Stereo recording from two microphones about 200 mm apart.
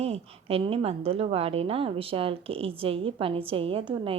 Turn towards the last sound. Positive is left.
turn(degrees=-25)  # may be behind; listen again after turning